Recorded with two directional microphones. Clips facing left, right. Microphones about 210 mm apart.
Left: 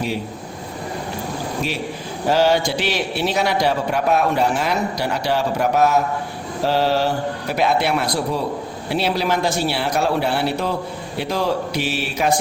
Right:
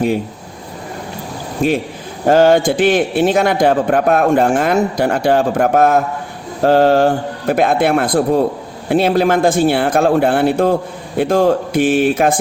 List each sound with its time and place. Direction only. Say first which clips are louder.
1.6 s a man's voice: right 8 dB; 50° right (ahead or behind)